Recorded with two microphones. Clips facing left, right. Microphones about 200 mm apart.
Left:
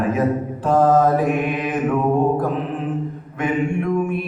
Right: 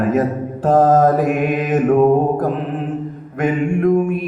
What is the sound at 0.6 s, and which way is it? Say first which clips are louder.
Mantra: right 3 dB; 40° right (ahead or behind).